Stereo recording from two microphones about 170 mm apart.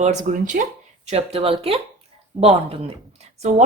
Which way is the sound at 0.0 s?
40° right (ahead or behind).